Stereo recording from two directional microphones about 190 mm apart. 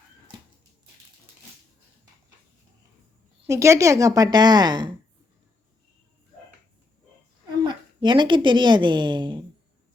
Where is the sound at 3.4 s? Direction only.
15° right (ahead or behind).